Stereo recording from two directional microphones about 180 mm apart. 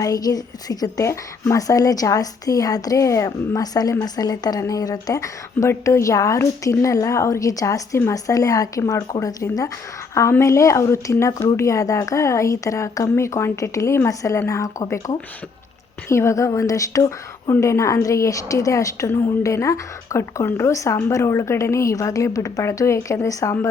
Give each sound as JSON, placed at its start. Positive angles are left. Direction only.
{"t": 0.0, "sound": "a woman's voice", "side_deg": 20}